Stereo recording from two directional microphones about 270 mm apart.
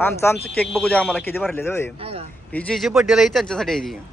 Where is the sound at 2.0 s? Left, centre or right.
Right.